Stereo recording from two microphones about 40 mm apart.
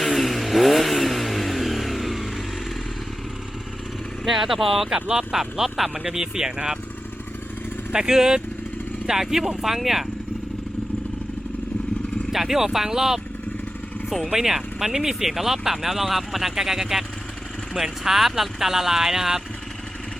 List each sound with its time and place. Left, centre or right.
0.1 s vehicle: centre
4.3 s speech: centre
4.9 s speech: right
5.3 s speech: centre
7.9 s speech: centre
12.3 s speech: centre
14.3 s speech: centre